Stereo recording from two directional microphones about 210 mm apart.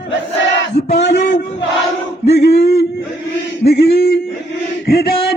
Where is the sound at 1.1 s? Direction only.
50° left (ahead or behind).